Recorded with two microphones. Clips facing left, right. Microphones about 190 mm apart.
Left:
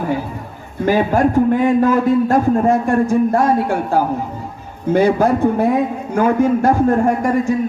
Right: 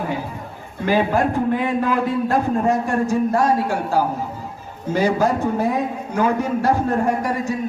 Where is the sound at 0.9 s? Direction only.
45° left (ahead or behind).